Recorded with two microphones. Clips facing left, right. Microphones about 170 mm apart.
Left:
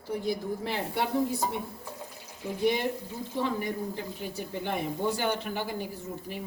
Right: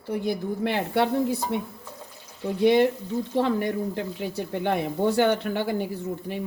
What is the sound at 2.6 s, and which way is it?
Speech, 70° right (ahead or behind).